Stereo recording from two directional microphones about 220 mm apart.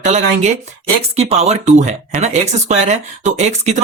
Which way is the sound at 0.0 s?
30° right (ahead or behind).